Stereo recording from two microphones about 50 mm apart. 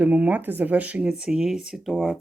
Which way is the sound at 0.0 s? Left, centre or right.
Right.